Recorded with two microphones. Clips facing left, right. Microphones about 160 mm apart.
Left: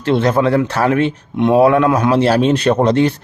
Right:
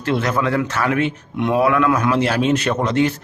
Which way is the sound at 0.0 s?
30° left (ahead or behind).